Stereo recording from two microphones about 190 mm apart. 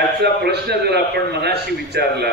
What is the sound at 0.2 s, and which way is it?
A man's voice, 60° right (ahead or behind).